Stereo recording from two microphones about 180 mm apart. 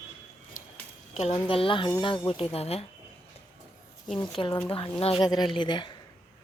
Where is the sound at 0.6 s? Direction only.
45° left (ahead or behind).